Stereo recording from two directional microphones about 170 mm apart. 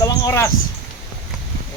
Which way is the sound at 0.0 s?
20° left (ahead or behind).